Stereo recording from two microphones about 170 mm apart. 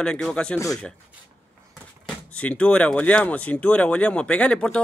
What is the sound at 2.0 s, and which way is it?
Speech, 10° left (ahead or behind).